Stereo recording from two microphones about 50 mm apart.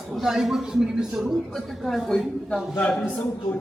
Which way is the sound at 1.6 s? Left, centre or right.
Centre.